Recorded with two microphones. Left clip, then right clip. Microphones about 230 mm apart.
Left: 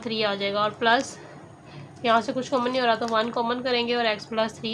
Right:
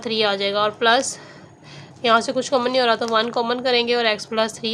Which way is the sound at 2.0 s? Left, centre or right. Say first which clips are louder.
Right 5 dB; right.